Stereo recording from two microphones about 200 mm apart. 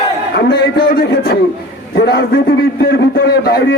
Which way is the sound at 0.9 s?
50° left (ahead or behind).